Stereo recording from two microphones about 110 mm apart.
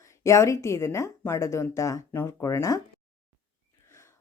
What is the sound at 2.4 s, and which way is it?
Speech, 30° left (ahead or behind).